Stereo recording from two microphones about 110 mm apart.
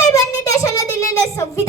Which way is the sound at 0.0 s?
30° left (ahead or behind).